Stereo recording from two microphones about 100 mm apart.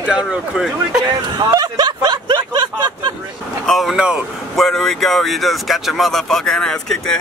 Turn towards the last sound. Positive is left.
turn(degrees=5)  # may be behind; listen again after turning